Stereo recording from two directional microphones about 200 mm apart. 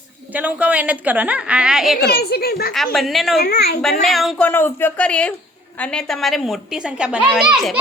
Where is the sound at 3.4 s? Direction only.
50° left (ahead or behind).